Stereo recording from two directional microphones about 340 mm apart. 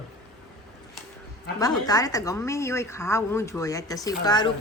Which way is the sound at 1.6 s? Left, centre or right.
Centre.